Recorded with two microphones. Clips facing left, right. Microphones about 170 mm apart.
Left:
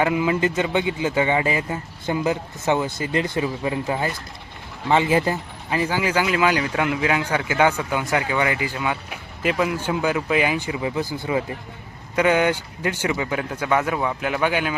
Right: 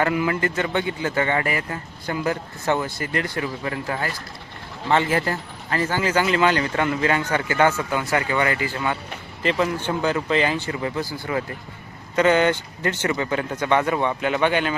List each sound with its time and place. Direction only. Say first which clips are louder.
0.0 s speech: left 2 dB; 20° left (ahead or behind)